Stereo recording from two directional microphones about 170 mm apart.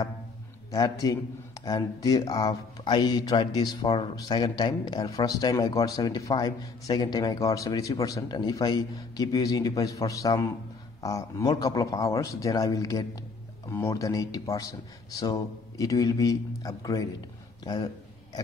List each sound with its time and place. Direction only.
0.7 s speech: 20° left (ahead or behind)